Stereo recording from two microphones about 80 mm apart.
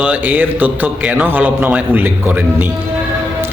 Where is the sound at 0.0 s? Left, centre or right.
Centre.